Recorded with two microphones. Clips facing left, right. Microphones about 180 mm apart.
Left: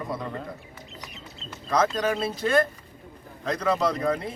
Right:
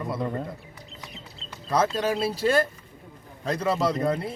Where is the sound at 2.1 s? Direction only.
35° right (ahead or behind).